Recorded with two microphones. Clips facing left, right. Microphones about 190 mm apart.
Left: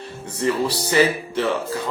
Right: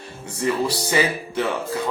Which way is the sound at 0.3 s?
10° right (ahead or behind).